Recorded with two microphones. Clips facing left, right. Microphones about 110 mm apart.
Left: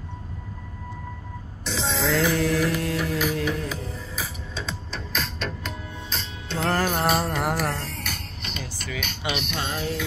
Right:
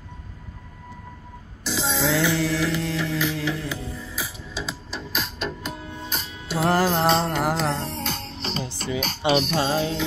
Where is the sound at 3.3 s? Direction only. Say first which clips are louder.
Left 1 dB; 80° right.